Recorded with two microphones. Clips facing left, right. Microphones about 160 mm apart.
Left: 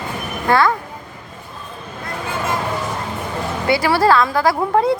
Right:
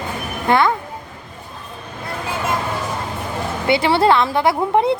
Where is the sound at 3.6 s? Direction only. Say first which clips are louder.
Even; 25° right (ahead or behind).